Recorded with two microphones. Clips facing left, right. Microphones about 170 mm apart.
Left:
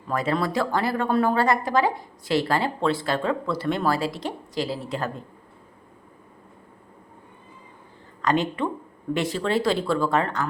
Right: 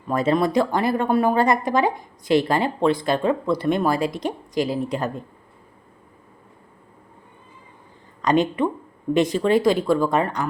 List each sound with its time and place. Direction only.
0.1 s a woman's voice: 20° right (ahead or behind)
8.2 s a woman's voice: 20° right (ahead or behind)